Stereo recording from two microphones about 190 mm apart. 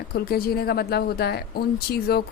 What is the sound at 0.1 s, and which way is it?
A woman's voice, 50° left (ahead or behind).